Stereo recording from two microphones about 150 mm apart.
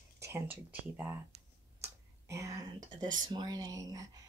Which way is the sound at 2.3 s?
20° right (ahead or behind).